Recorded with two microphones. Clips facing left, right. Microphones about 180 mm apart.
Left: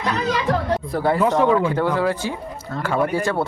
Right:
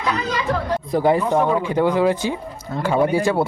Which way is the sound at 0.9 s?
15° right (ahead or behind).